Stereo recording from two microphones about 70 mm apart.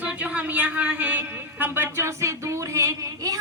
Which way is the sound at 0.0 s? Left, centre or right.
Right.